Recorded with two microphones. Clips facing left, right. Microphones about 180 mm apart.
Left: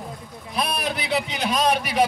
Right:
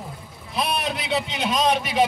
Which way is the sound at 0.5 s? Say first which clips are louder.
Right 1 dB; centre (ahead or behind).